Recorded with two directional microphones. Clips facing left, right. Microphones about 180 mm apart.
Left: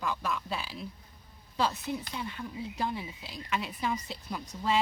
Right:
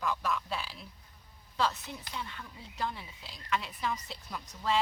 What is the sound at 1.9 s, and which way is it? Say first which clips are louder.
A woman's voice: left 6 dB; 5° left (ahead or behind).